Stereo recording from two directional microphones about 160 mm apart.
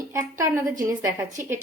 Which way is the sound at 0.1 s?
20° right (ahead or behind).